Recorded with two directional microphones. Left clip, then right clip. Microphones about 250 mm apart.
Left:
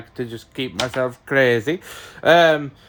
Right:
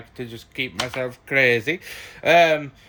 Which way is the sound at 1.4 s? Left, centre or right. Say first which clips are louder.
Left 1 dB; left.